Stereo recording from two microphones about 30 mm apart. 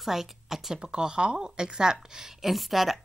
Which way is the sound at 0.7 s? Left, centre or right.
Right.